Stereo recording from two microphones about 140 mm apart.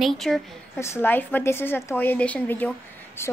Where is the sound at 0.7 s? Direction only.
20° left (ahead or behind).